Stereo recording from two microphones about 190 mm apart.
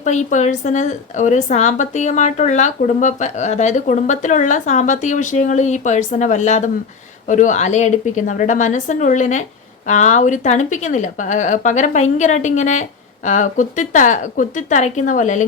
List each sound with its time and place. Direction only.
0.0 s a woman's voice: 40° left (ahead or behind)